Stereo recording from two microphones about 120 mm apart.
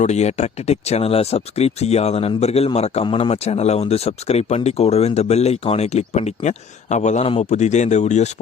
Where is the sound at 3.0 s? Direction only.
45° left (ahead or behind).